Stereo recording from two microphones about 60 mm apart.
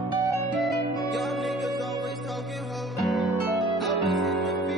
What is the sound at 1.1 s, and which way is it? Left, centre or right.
Music, centre.